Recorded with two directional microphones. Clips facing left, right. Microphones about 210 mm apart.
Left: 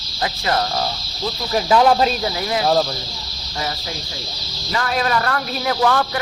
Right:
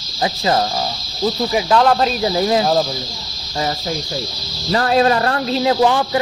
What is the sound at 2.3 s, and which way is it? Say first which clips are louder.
Speech: right 7 dB; 35° right (ahead or behind).